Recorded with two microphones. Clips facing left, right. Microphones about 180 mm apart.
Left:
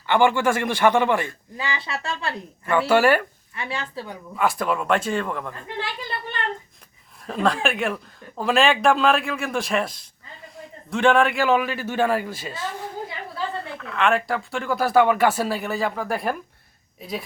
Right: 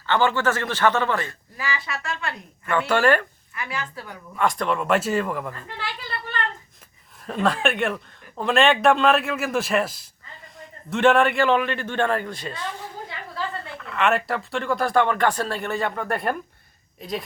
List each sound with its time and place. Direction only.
0.0 s a man's voice: 15° left (ahead or behind); by 2.3 s 30° left (ahead or behind)
2.6 s a man's voice: 10° left (ahead or behind)
3.5 s speech: 30° left (ahead or behind)
4.1 s speech: 5° left (ahead or behind)
7.2 s speech: centre (ahead or behind)
13.7 s speech: centre (ahead or behind)